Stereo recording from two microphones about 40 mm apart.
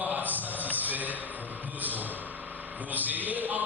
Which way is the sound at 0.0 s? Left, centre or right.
Right.